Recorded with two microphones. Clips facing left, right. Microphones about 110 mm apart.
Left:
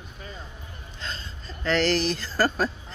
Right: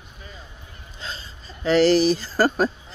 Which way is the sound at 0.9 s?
10° right (ahead or behind).